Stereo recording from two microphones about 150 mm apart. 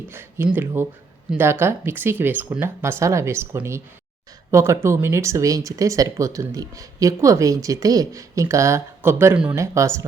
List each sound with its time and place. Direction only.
0.1 s speech: 15° right (ahead or behind)